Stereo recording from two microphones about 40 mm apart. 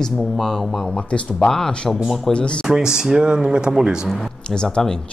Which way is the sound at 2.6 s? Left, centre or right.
Centre.